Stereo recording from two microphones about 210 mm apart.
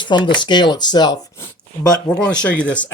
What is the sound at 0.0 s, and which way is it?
Speech, 20° left (ahead or behind).